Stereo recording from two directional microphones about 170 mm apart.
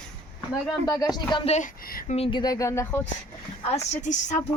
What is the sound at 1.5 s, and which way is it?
Speech, 55° left (ahead or behind).